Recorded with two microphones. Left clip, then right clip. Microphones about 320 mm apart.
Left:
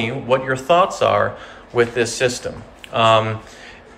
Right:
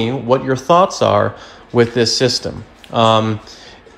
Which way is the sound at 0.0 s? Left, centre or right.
Centre.